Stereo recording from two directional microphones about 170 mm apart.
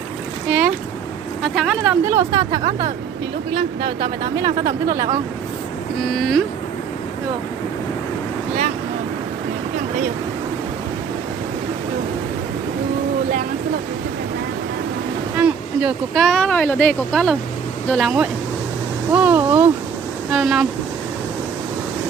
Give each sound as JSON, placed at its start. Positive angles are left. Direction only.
{"t": 0.5, "sound": "a sound", "side_deg": -5}
{"t": 1.5, "sound": "speech", "side_deg": 0}
{"t": 2.0, "sound": "speech", "side_deg": -20}
{"t": 15.4, "sound": "speech", "side_deg": -5}